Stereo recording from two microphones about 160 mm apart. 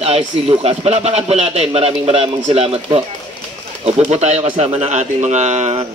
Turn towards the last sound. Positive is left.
turn(degrees=-45)  # may be behind; listen again after turning